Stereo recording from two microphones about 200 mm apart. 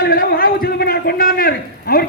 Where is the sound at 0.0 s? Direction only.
45° left (ahead or behind).